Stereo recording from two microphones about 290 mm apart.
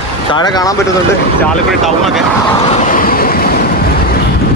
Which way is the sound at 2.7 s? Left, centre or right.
Left.